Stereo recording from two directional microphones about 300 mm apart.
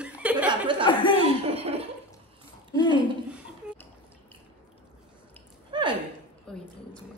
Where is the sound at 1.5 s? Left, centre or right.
Centre.